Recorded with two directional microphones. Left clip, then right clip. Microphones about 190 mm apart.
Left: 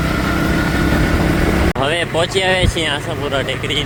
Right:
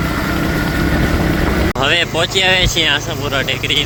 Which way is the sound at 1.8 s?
20° left (ahead or behind).